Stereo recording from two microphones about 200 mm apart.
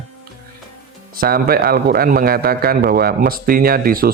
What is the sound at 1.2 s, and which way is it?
Speech, 45° right (ahead or behind).